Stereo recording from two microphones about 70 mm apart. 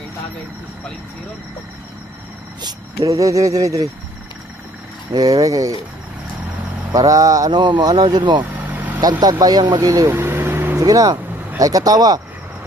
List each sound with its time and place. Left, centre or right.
2.6 s speech: right
3.1 s speech: right
5.1 s speech: right
6.9 s speech: right
9.0 s speech: right
10.1 s vehicle: right
10.8 s speech: right